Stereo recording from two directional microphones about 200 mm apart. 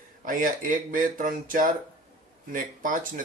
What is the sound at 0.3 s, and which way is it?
Speech, 40° right (ahead or behind).